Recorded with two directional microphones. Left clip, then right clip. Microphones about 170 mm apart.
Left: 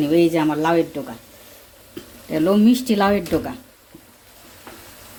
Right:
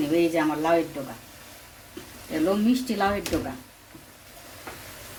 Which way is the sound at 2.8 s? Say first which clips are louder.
Left 7 dB; 60° left (ahead or behind).